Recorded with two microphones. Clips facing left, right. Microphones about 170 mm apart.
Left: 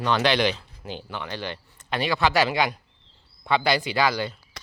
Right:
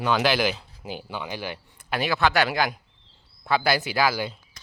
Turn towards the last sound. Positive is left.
turn(degrees=-10)  # may be behind; listen again after turning